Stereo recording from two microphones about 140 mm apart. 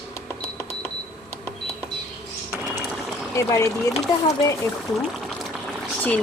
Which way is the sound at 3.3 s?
20° left (ahead or behind).